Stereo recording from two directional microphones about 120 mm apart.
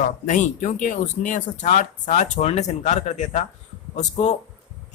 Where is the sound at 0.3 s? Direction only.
90° left.